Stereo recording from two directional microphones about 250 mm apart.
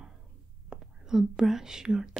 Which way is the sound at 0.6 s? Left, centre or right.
Centre.